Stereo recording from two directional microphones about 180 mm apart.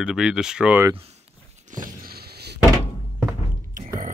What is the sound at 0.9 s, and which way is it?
Speech, 35° right (ahead or behind).